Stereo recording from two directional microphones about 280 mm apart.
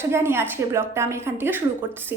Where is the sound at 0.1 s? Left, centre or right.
Centre.